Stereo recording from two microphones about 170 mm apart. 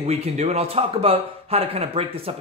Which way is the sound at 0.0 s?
40° right (ahead or behind).